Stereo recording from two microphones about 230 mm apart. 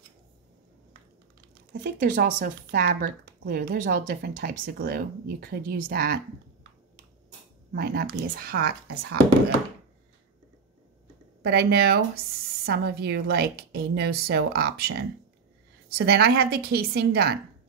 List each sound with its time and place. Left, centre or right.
1.7 s speech: right
7.7 s speech: right
11.4 s a woman's voice: right